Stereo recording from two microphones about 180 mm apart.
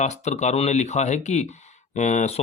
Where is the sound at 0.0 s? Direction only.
40° left (ahead or behind).